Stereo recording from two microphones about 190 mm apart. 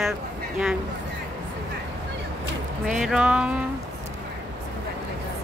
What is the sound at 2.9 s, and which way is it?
Speech, 5° right (ahead or behind).